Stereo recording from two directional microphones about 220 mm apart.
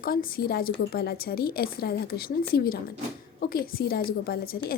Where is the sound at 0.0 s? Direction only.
40° left (ahead or behind).